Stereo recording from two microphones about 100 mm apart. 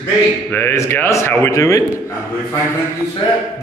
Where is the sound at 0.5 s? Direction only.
25° left (ahead or behind).